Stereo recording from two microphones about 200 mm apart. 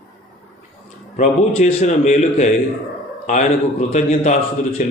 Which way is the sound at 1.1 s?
35° left (ahead or behind).